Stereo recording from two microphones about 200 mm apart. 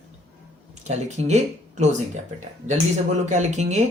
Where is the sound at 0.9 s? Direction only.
35° right (ahead or behind).